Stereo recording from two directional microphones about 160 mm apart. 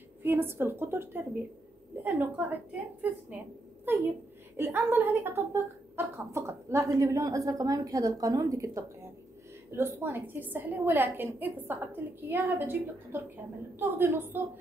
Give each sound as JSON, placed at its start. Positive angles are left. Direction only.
{"t": 0.2, "sound": "a woman's voice", "side_deg": -15}